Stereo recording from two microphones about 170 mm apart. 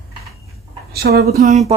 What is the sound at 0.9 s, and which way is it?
Speech, 70° right (ahead or behind).